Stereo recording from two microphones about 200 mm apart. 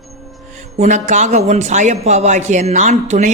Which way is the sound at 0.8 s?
35° right (ahead or behind).